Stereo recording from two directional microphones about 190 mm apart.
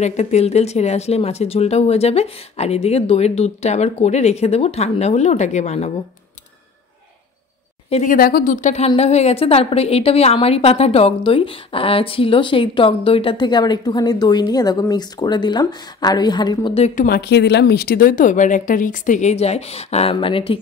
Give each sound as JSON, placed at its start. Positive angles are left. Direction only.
{"t": 0.0, "sound": "speech", "side_deg": 35}
{"t": 7.9, "sound": "a woman's voice", "side_deg": 45}
{"t": 16.9, "sound": "a woman's voice", "side_deg": 50}